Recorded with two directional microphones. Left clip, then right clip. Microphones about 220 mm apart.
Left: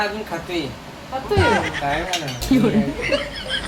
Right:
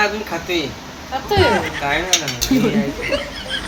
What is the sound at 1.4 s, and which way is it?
Speech, centre (ahead or behind).